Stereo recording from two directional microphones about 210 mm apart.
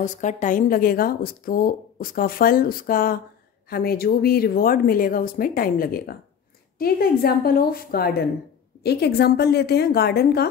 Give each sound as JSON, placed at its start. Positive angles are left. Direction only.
{"t": 0.0, "sound": "speech", "side_deg": 35}